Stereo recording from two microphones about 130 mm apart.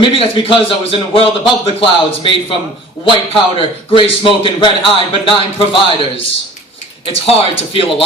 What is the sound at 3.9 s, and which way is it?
Speech, 45° left (ahead or behind).